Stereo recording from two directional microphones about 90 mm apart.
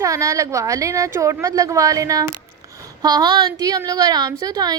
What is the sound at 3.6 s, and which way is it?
A woman's voice, 45° right (ahead or behind).